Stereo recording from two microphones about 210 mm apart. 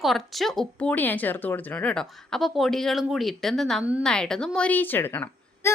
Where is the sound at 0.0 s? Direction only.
Centre (ahead or behind).